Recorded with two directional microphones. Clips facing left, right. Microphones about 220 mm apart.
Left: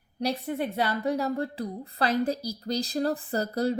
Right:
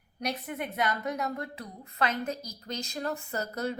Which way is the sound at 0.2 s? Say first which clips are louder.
Left 6 dB; 30° left (ahead or behind).